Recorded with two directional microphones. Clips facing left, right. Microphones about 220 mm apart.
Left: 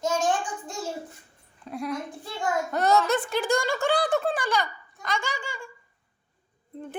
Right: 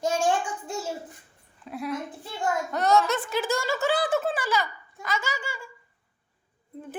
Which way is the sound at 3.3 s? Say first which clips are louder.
Left 2 dB; centre (ahead or behind).